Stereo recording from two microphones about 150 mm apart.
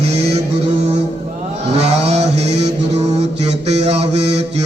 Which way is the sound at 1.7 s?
45° right (ahead or behind).